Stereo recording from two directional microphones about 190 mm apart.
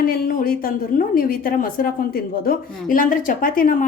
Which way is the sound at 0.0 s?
50° left (ahead or behind).